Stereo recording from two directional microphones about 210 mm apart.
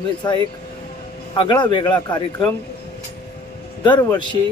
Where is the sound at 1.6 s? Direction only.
20° left (ahead or behind).